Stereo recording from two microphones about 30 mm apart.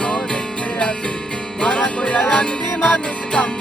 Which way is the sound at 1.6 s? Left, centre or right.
Left.